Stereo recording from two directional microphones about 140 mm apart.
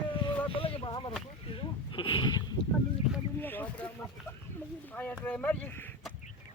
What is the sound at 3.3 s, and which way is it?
Speech, 15° left (ahead or behind).